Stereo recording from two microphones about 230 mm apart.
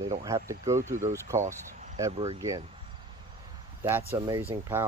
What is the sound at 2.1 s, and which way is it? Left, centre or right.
Speech, right.